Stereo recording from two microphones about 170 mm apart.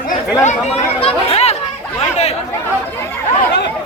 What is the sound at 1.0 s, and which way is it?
Speech, 35° left (ahead or behind).